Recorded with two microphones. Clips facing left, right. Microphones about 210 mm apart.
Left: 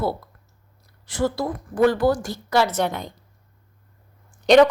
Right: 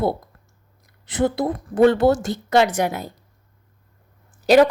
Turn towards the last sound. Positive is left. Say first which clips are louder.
# even
turn(degrees=-5)  # may be behind; listen again after turning